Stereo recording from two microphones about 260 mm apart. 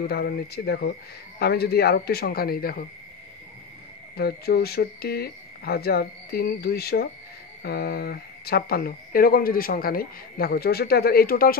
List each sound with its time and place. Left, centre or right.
0.0 s speech: left
4.2 s speech: left